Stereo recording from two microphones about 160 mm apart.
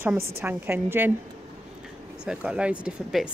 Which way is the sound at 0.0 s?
10° right (ahead or behind).